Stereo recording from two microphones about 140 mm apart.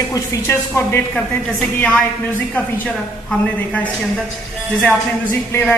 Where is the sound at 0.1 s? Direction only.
20° left (ahead or behind).